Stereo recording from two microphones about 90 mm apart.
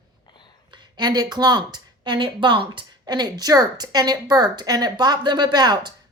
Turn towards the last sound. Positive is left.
turn(degrees=-50)  # may be behind; listen again after turning